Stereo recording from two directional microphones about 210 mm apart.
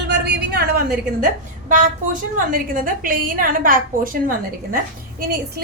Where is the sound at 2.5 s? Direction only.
40° right (ahead or behind).